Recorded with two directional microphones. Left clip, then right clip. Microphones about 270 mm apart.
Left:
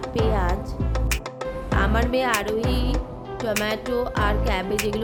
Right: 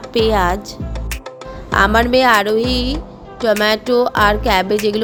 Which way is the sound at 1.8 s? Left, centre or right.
Right.